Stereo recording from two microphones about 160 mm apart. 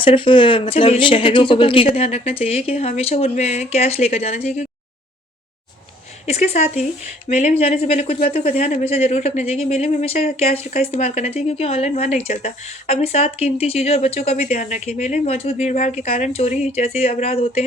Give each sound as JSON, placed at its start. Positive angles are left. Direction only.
{"t": 0.0, "sound": "speech", "side_deg": 30}
{"t": 6.2, "sound": "speech", "side_deg": 40}
{"t": 10.8, "sound": "speech", "side_deg": 50}